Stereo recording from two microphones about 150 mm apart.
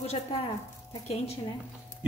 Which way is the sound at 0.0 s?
45° left (ahead or behind).